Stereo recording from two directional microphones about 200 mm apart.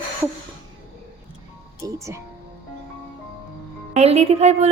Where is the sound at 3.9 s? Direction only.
30° right (ahead or behind).